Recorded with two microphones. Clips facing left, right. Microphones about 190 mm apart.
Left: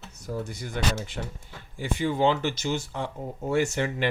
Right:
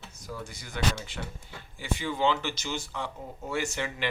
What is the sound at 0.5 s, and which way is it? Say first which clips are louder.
Speech: right 1 dB; 55° left (ahead or behind).